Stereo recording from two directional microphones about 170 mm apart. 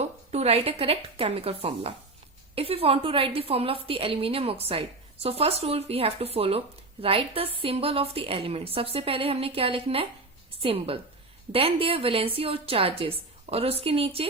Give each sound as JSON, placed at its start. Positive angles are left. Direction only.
{"t": 0.0, "sound": "a woman's voice", "side_deg": -40}